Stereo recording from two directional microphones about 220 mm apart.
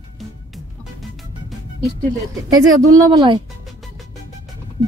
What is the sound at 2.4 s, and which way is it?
Speech, 15° right (ahead or behind).